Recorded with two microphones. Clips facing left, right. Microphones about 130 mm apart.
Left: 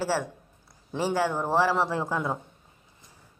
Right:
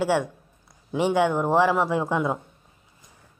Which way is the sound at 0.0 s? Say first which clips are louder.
Right 5 dB; 15° right (ahead or behind).